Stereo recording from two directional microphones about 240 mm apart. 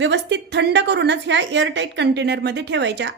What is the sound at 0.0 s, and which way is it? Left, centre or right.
A woman's voice, right.